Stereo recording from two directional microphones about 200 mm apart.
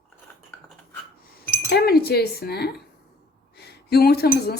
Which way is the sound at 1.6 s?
50° left (ahead or behind).